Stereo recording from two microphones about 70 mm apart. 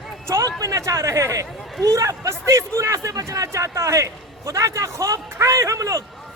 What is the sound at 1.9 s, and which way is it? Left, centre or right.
A man's voice, right.